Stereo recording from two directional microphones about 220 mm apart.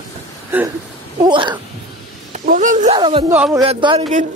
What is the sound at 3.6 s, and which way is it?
Speech, 25° right (ahead or behind).